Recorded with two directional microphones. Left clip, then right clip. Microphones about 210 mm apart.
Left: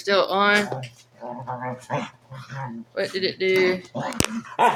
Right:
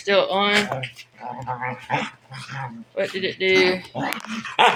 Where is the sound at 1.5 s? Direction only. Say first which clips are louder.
Right 4 dB; 35° right (ahead or behind).